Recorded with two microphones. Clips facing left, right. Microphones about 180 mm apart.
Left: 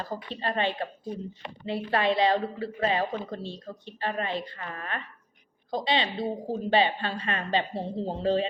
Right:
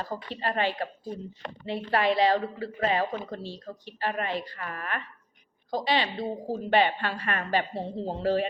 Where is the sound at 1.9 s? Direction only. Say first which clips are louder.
Right 1 dB; 25° left (ahead or behind).